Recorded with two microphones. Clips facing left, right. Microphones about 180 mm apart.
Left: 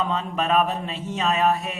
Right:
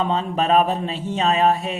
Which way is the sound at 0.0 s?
30° right (ahead or behind).